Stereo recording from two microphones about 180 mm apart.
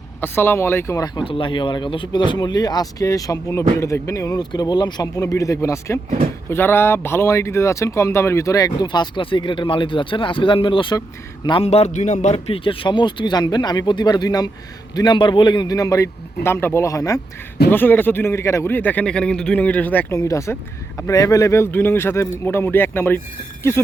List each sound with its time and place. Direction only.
0.2 s a man's voice: 10° left (ahead or behind)